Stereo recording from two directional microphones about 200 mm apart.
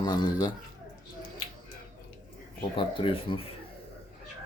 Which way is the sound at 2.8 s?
25° left (ahead or behind).